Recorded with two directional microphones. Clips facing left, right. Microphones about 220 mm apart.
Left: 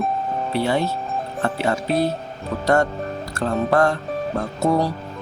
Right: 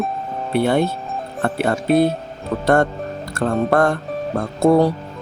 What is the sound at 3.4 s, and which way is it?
Speech, 50° right (ahead or behind).